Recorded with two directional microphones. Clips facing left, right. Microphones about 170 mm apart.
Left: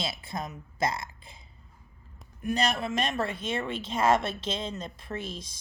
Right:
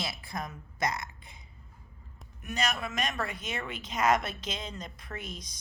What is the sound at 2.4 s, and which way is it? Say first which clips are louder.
Speech: left 5 dB; 30° left (ahead or behind).